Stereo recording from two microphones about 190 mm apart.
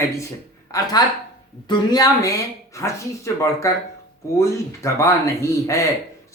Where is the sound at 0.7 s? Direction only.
20° left (ahead or behind).